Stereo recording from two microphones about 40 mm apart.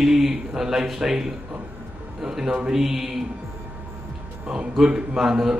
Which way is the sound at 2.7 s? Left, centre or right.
Centre.